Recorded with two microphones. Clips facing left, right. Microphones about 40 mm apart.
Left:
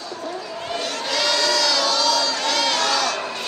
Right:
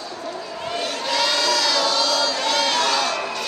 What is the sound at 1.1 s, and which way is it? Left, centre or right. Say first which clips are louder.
Crowd: even; centre.